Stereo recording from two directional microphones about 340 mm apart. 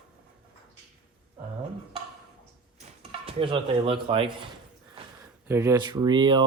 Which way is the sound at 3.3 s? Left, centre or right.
Centre.